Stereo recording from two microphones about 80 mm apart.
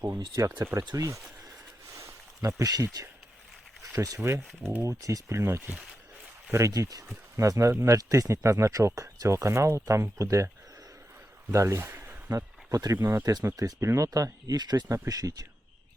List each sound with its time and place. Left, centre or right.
0.6 s speech: right
2.0 s a sound: right
3.9 s speech: right
7.9 s speech: right
11.5 s speech: right
12.3 s speech: right
14.9 s speech: right